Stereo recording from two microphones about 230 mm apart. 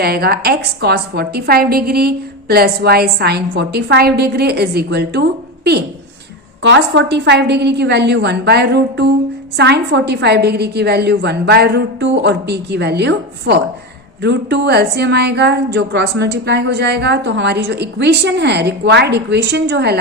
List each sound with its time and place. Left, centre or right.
0.0 s a woman's voice: right
6.6 s a woman's voice: right